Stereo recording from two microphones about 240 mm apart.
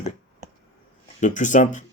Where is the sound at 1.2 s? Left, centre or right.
Left.